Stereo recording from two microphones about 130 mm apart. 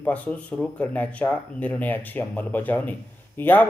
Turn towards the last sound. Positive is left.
turn(degrees=15)  # may be behind; listen again after turning